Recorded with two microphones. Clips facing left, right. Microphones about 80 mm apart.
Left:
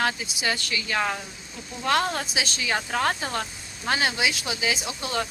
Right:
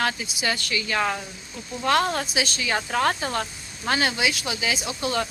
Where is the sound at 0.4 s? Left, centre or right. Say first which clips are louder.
Right 1 dB; centre.